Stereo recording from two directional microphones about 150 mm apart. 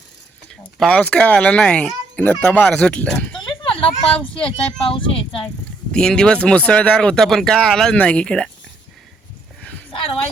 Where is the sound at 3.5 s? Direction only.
35° left (ahead or behind).